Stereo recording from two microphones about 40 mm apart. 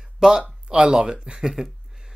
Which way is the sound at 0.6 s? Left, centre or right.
Right.